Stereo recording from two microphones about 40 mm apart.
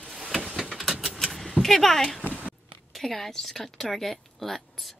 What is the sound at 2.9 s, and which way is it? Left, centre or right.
Speech, centre.